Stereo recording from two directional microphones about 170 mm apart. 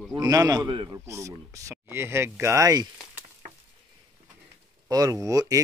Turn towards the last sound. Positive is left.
turn(degrees=-20)  # may be behind; listen again after turning